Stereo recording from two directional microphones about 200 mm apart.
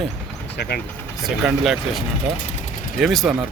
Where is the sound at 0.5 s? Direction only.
55° left (ahead or behind).